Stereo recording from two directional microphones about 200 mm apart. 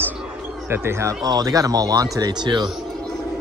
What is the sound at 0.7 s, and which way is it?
Speech, 15° right (ahead or behind).